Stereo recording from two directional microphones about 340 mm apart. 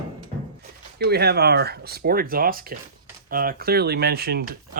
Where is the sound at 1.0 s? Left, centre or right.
Right.